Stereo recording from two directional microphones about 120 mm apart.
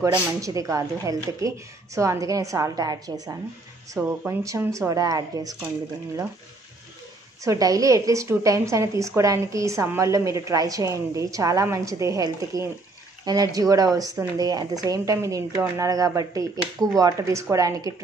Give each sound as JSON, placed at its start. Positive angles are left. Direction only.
{"t": 0.4, "sound": "a woman's voice", "side_deg": -30}
{"t": 4.0, "sound": "speech", "side_deg": -15}
{"t": 4.7, "sound": "a woman's voice", "side_deg": -30}
{"t": 7.4, "sound": "a woman's voice", "side_deg": -30}